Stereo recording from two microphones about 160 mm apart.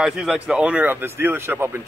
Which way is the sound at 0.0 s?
5° right (ahead or behind).